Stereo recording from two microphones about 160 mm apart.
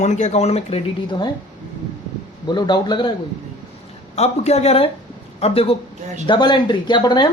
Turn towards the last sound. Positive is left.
turn(degrees=25)  # may be behind; listen again after turning